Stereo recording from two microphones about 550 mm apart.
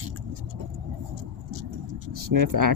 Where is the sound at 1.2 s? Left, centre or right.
Right.